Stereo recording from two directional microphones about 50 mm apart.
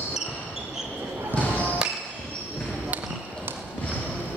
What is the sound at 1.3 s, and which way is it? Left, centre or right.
Basketball bounce, left.